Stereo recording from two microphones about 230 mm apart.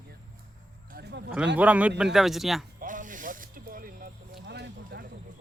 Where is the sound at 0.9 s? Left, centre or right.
Right.